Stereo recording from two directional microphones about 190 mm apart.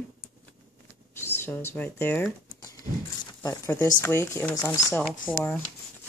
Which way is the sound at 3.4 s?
15° left (ahead or behind).